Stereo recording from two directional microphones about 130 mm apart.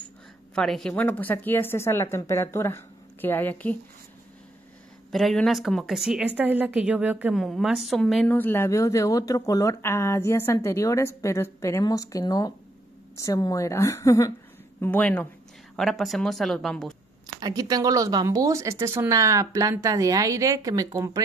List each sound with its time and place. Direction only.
0.6 s speech: 5° left (ahead or behind)
5.1 s speech: 5° left (ahead or behind)
8.4 s speech: 15° left (ahead or behind)
14.8 s speech: 10° left (ahead or behind)
17.4 s speech: 30° right (ahead or behind)